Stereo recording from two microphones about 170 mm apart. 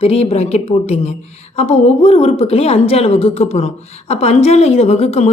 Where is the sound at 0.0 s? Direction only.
35° left (ahead or behind).